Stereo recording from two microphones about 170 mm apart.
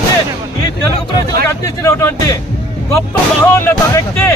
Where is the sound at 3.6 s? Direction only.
15° left (ahead or behind).